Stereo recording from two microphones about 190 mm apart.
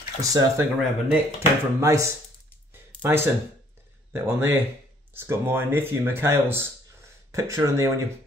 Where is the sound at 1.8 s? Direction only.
15° right (ahead or behind).